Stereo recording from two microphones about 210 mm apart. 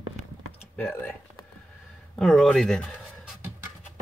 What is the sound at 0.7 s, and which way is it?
Speech, 10° left (ahead or behind).